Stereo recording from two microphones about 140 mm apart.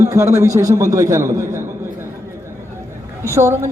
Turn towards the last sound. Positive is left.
turn(degrees=-20)  # may be behind; listen again after turning